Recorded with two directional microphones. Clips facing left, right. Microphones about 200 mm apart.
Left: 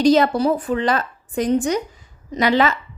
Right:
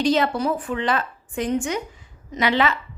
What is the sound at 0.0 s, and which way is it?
A woman's voice, 40° left (ahead or behind).